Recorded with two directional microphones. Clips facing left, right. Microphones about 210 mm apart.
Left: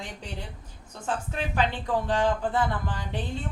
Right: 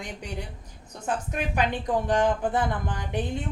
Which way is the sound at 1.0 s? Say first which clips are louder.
Right 2 dB; 15° right (ahead or behind).